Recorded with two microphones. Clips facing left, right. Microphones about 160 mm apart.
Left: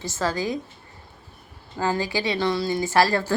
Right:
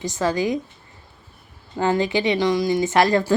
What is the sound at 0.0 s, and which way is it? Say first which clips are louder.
Speech: right 4 dB; 15° right (ahead or behind).